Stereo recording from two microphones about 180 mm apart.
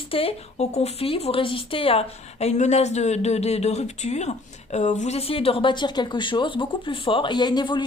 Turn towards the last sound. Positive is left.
turn(degrees=25)  # may be behind; listen again after turning